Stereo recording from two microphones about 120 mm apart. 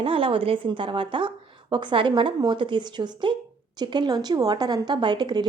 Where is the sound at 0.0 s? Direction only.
50° right (ahead or behind).